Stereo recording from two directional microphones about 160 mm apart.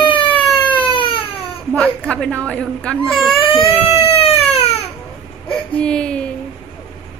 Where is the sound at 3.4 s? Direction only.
35° left (ahead or behind).